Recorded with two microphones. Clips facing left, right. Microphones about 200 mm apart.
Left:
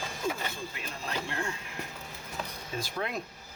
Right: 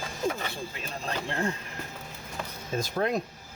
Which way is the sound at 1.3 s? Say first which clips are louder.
Right 5 dB; 35° right (ahead or behind).